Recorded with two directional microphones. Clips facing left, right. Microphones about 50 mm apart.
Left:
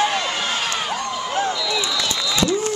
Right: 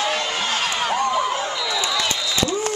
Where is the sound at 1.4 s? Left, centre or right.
Centre.